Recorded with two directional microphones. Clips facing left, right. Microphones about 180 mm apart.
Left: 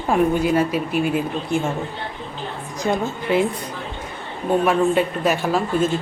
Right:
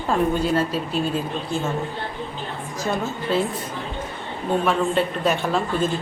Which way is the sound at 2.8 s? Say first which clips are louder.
Left 3 dB; 15° left (ahead or behind).